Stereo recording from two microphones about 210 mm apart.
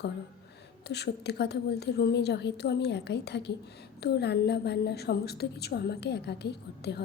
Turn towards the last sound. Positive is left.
turn(degrees=50)  # may be behind; listen again after turning